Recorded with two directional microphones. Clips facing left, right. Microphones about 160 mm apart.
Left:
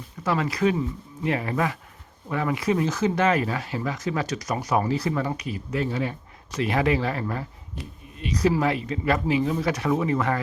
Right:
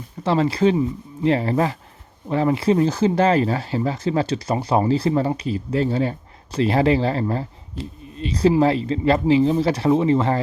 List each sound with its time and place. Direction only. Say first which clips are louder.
0.2 s speech: right 5 dB; 30° right (ahead or behind)